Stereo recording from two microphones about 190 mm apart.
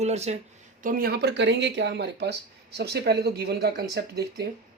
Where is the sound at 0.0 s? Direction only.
35° right (ahead or behind).